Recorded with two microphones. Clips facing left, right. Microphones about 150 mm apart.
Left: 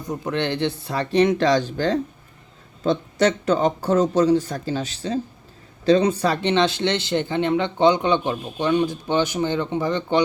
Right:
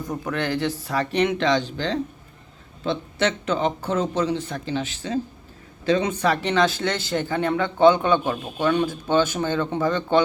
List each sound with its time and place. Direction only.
0.3 s speech: 25° left (ahead or behind)